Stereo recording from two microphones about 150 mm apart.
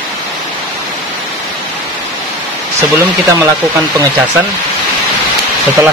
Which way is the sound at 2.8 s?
20° right (ahead or behind).